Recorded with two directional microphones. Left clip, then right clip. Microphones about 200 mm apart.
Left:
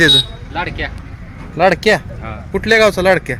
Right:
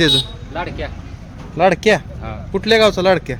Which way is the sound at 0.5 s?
40° left (ahead or behind).